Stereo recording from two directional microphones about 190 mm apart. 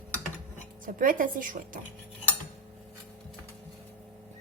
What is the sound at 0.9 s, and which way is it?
Speech, 45° right (ahead or behind).